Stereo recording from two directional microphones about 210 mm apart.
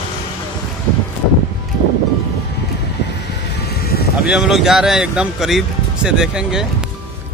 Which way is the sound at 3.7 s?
50° left (ahead or behind).